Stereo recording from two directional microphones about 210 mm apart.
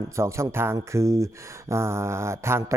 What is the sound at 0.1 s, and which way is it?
Speech, 15° right (ahead or behind).